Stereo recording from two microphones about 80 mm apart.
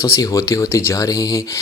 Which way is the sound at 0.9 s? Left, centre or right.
Left.